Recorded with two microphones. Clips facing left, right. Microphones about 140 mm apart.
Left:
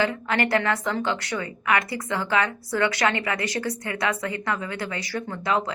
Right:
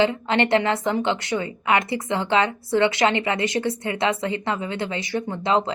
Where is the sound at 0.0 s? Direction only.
25° right (ahead or behind).